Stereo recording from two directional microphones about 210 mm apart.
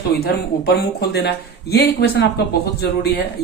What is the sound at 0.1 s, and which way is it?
Speech, 50° left (ahead or behind).